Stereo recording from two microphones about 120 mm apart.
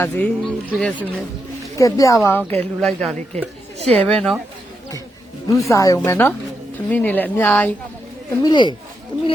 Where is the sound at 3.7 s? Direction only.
55° right (ahead or behind).